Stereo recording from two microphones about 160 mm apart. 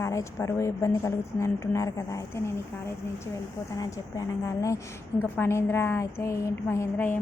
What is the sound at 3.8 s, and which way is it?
A woman's voice, 20° left (ahead or behind).